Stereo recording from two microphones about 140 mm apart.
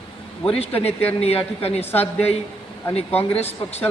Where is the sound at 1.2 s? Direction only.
45° left (ahead or behind).